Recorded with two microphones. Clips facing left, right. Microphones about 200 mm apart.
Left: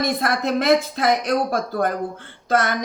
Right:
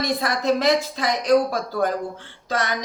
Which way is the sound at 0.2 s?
55° left (ahead or behind).